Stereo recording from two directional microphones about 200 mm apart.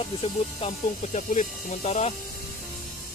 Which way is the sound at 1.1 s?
40° left (ahead or behind).